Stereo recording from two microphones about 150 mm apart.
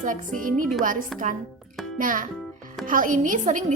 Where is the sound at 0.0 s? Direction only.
60° right (ahead or behind).